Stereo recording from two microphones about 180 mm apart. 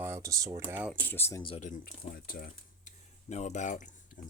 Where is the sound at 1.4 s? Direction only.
30° left (ahead or behind).